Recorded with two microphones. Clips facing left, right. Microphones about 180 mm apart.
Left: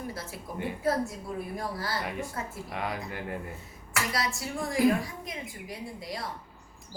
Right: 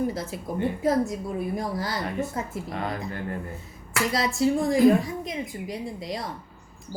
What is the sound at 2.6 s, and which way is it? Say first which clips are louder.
Speech: right 4 dB; 10° left (ahead or behind).